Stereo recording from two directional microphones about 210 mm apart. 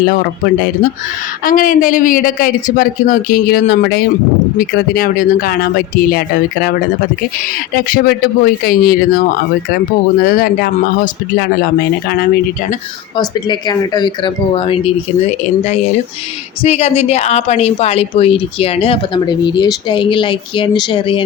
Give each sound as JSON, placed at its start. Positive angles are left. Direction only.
{"t": 0.0, "sound": "a man's voice", "side_deg": 45}
{"t": 7.8, "sound": "a man's voice", "side_deg": 45}
{"t": 13.1, "sound": "a woman's voice", "side_deg": 20}
{"t": 16.6, "sound": "a woman's voice", "side_deg": 30}